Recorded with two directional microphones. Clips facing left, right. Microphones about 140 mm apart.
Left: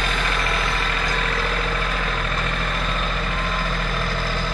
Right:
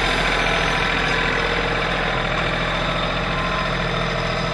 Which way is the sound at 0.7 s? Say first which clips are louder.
Right 3 dB; 65° right (ahead or behind).